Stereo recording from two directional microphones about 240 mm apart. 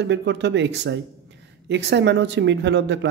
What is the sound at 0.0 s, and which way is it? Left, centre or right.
Speech, right.